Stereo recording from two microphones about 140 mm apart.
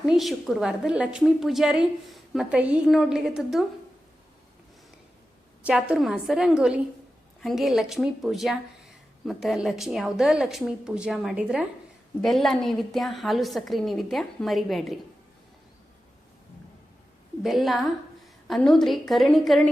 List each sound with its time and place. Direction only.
0.0 s a woman's voice: centre (ahead or behind)
5.6 s a woman's voice: 5° right (ahead or behind)
17.4 s a woman's voice: centre (ahead or behind)